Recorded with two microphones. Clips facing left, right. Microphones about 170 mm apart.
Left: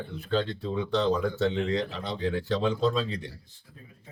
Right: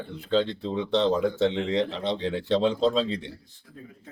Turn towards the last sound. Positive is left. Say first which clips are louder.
# right 3 dB
turn(degrees=-25)  # may be behind; listen again after turning